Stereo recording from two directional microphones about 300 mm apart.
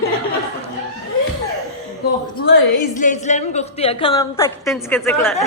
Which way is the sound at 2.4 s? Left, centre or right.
Left.